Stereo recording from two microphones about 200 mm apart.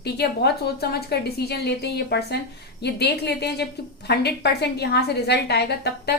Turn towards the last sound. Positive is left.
turn(degrees=55)  # may be behind; listen again after turning